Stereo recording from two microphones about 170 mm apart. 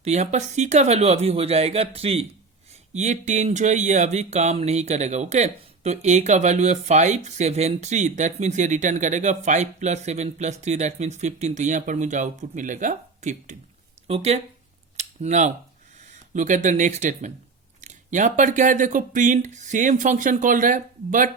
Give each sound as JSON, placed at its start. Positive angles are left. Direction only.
{"t": 0.0, "sound": "speech", "side_deg": -40}
{"t": 14.9, "sound": "a sound", "side_deg": -45}
{"t": 16.0, "sound": "speech", "side_deg": -45}